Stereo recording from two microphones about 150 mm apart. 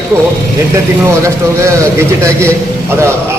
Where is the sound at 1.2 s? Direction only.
20° right (ahead or behind).